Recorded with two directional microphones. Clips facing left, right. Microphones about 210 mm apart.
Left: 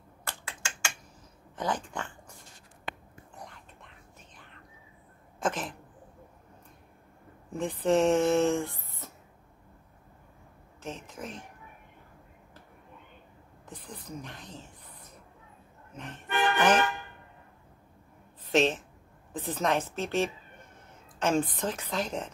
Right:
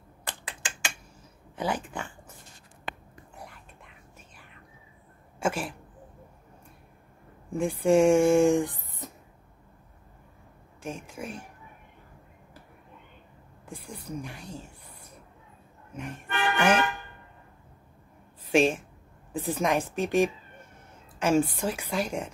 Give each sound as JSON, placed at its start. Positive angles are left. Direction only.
{"t": 0.2, "sound": "computer keyboard", "side_deg": -15}
{"t": 1.6, "sound": "speech", "side_deg": -10}
{"t": 3.3, "sound": "whispering", "side_deg": -10}
{"t": 5.4, "sound": "speech", "side_deg": -10}
{"t": 7.5, "sound": "speech", "side_deg": -10}
{"t": 10.8, "sound": "speech", "side_deg": -10}
{"t": 13.7, "sound": "a sound", "side_deg": -10}
{"t": 15.9, "sound": "music", "side_deg": -10}
{"t": 18.4, "sound": "a woman's voice", "side_deg": -10}